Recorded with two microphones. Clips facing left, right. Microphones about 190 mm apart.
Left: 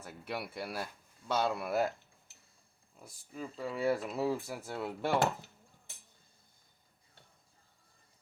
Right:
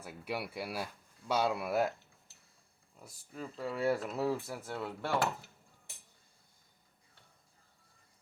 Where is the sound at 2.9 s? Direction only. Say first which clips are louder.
Left 1 dB; centre (ahead or behind).